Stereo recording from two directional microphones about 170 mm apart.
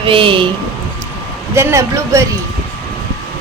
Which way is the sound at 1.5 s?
15° right (ahead or behind).